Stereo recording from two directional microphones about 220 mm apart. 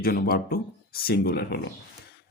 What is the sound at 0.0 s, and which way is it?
Speech, 40° left (ahead or behind).